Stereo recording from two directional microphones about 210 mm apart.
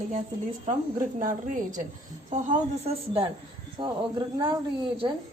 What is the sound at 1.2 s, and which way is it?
A woman's voice, 40° right (ahead or behind).